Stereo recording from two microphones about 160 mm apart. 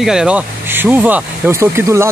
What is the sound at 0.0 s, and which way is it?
Speech, 5° right (ahead or behind).